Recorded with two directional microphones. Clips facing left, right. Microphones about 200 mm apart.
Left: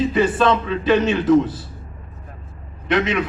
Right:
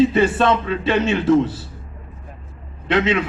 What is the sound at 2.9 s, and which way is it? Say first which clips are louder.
Speech: right 1 dB; 30° right (ahead or behind).